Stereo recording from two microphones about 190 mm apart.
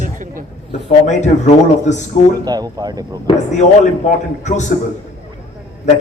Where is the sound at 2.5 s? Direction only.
20° right (ahead or behind).